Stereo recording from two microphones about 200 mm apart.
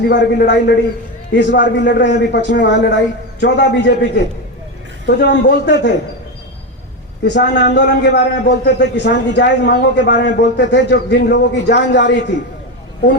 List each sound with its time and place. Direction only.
0.0 s a man's voice: 55° left (ahead or behind)
7.3 s a man's voice: 60° left (ahead or behind)